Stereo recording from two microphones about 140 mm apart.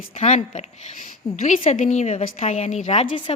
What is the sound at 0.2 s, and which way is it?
Speech, 50° left (ahead or behind).